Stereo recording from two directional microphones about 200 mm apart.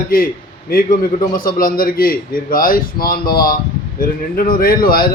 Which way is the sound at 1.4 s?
45° left (ahead or behind).